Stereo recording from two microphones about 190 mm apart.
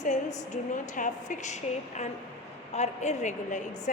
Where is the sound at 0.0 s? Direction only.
40° left (ahead or behind).